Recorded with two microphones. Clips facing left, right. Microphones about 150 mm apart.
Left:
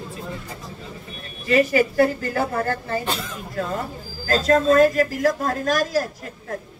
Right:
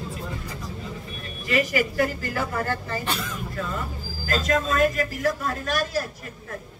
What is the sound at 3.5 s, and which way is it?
Speech, 40° left (ahead or behind).